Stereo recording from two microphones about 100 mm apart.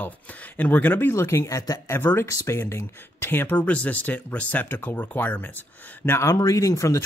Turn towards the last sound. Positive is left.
turn(degrees=30)  # may be behind; listen again after turning